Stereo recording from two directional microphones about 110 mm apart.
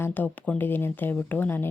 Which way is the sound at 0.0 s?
15° left (ahead or behind).